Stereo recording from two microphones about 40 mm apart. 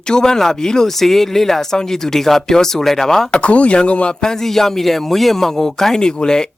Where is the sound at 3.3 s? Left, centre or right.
Left.